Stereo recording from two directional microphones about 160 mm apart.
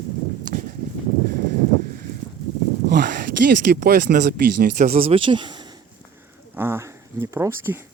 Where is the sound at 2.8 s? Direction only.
70° right (ahead or behind); by 5.0 s 50° right (ahead or behind).